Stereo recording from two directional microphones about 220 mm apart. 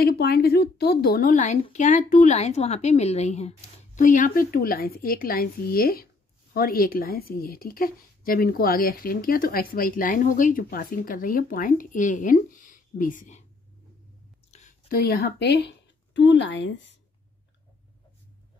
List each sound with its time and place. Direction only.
0.0 s a woman's voice: 45° left (ahead or behind)
14.5 s speech: 35° left (ahead or behind); by 16.7 s 55° left (ahead or behind)